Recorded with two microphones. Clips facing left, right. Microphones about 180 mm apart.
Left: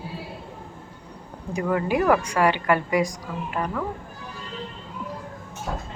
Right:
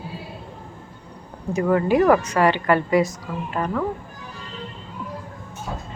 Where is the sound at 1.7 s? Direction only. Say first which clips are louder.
Right 4 dB; 15° left (ahead or behind).